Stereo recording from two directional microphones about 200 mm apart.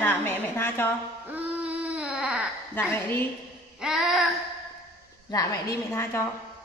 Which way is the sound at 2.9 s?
10° left (ahead or behind).